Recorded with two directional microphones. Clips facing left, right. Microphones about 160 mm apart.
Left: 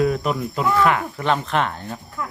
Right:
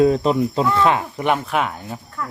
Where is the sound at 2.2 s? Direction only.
10° left (ahead or behind).